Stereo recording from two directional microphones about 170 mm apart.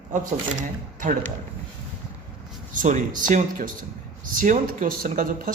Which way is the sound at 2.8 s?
50° right (ahead or behind).